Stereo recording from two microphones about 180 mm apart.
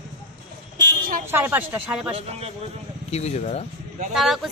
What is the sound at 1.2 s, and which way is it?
Speech, 10° right (ahead or behind).